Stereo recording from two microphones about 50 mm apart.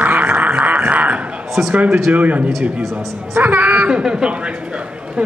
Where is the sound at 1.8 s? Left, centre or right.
Centre.